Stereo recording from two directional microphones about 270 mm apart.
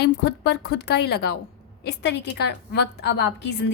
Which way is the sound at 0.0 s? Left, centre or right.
Left.